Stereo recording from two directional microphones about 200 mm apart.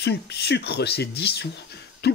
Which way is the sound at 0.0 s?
55° left (ahead or behind).